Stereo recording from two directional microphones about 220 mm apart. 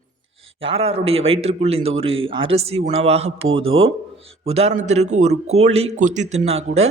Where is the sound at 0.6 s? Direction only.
25° right (ahead or behind).